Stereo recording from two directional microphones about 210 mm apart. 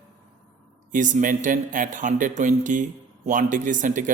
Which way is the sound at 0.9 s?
35° right (ahead or behind).